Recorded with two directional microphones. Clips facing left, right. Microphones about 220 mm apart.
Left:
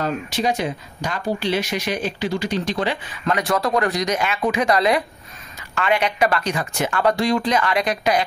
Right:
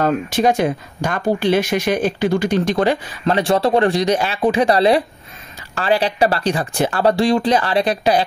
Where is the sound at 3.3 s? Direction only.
30° right (ahead or behind).